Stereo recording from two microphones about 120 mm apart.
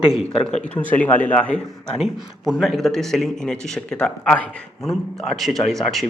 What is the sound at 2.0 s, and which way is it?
A man's voice, centre (ahead or behind).